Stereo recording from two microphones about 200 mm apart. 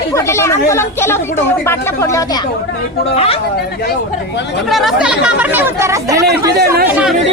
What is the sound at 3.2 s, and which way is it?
Speech, 30° left (ahead or behind).